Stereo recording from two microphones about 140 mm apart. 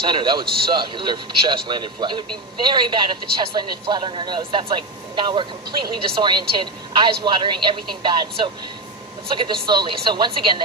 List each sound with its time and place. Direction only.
0.0 s a woman's voice: 35° right (ahead or behind)